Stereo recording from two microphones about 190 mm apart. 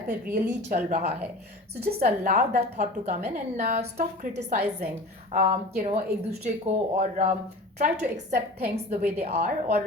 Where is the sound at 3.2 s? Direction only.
55° right (ahead or behind).